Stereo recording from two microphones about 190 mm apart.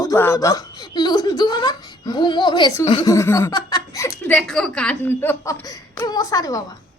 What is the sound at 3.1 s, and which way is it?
A woman's voice, 15° left (ahead or behind).